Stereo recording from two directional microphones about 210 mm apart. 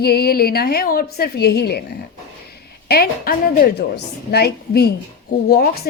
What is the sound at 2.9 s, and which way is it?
A woman's voice, 45° left (ahead or behind).